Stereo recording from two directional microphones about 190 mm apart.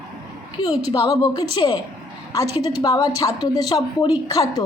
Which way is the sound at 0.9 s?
20° left (ahead or behind).